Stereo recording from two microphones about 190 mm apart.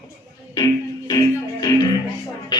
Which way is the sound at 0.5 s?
20° left (ahead or behind).